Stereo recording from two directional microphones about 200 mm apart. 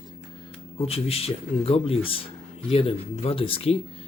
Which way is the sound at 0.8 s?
30° left (ahead or behind).